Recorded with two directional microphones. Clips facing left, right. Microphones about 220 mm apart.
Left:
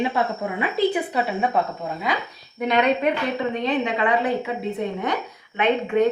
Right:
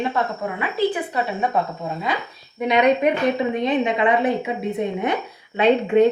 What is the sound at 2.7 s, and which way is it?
A woman's voice, 15° right (ahead or behind).